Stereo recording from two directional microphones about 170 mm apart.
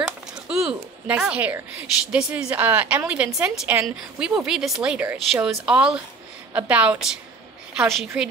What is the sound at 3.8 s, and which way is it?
Female singing, 5° right (ahead or behind).